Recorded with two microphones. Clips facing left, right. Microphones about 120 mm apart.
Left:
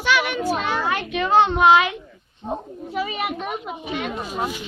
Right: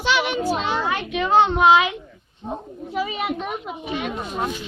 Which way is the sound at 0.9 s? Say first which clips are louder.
Even; 5° right (ahead or behind).